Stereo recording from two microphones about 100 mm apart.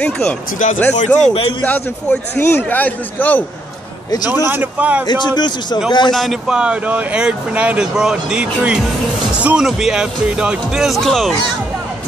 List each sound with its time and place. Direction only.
0.0 s a man's voice: 15° left (ahead or behind)
4.5 s speech: 15° right (ahead or behind)
5.0 s a man's voice: 45° left (ahead or behind)
6.1 s speech: centre (ahead or behind)
6.5 s speech: 10° right (ahead or behind)